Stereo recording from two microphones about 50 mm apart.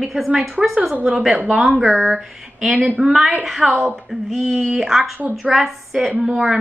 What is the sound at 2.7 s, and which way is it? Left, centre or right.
Speech, right.